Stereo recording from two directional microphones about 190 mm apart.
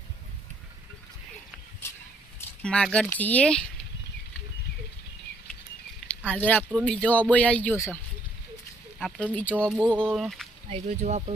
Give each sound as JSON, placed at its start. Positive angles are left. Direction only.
{"t": 2.6, "sound": "speech", "side_deg": 5}
{"t": 6.1, "sound": "speech", "side_deg": 10}
{"t": 9.0, "sound": "speech", "side_deg": 5}
{"t": 10.7, "sound": "speech", "side_deg": -40}